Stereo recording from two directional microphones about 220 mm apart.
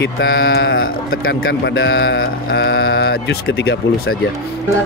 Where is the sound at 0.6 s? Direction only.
60° left (ahead or behind).